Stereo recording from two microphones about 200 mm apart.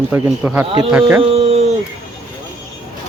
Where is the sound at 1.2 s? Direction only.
30° right (ahead or behind).